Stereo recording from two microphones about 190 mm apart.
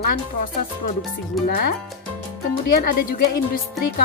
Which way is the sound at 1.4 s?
50° left (ahead or behind).